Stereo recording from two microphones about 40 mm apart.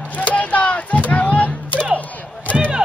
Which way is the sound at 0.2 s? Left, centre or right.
Left.